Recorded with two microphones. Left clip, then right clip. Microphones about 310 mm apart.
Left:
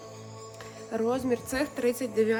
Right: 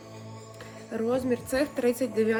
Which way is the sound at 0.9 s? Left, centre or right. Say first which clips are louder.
Even; centre.